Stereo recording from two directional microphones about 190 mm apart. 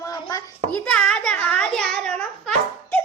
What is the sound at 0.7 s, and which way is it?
A child's voice, 5° left (ahead or behind).